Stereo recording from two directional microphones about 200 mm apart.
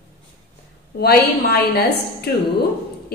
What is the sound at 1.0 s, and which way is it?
A woman's voice, 50° left (ahead or behind).